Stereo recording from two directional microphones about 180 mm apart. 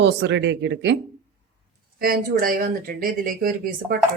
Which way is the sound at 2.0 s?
55° right (ahead or behind).